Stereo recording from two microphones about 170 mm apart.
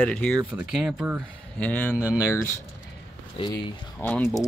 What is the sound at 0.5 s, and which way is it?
Speech, 5° right (ahead or behind).